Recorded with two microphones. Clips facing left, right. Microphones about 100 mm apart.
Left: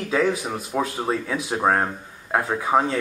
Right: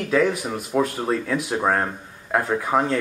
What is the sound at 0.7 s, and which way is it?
Speech, 15° left (ahead or behind).